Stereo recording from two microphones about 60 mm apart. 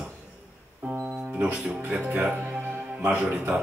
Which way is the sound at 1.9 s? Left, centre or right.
Right.